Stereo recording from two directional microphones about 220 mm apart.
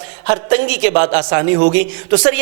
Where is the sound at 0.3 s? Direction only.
15° right (ahead or behind).